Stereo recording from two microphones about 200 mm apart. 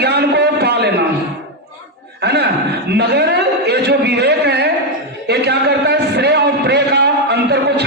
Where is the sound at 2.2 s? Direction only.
55° right (ahead or behind).